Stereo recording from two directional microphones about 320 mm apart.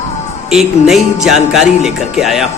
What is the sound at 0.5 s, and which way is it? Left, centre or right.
Speech, centre.